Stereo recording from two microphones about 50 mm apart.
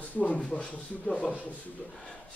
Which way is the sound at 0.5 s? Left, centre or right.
Left.